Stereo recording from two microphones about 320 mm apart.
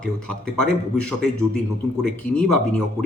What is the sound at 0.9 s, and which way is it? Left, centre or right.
Speech, centre.